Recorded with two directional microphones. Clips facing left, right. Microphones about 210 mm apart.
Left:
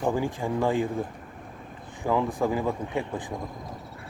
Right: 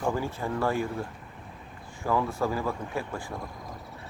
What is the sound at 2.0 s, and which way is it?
Speech, 15° left (ahead or behind).